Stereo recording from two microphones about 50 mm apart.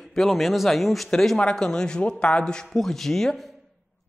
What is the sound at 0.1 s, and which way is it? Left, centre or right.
Speech, centre.